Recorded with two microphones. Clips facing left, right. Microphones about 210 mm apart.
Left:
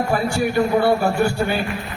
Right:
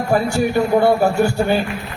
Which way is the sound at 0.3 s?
45° right (ahead or behind).